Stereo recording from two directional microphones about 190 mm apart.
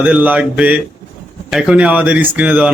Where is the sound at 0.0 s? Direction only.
5° right (ahead or behind).